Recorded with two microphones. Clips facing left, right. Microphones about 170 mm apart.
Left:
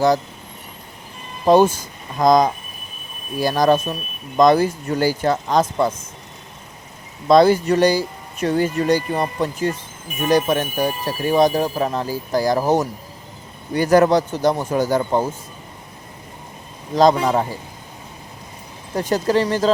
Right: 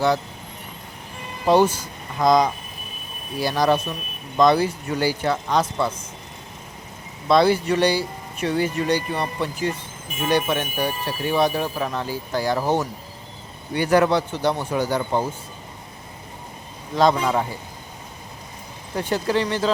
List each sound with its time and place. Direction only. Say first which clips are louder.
1.5 s speech: left 4 dB; 45° left (ahead or behind)
7.3 s speech: left 4 dB; 45° left (ahead or behind)
16.9 s speech: left 4 dB; 40° left (ahead or behind)
18.9 s speech: left 4 dB; 40° left (ahead or behind)